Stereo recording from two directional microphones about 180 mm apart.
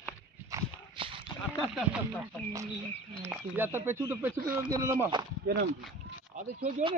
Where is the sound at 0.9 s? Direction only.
30° right (ahead or behind).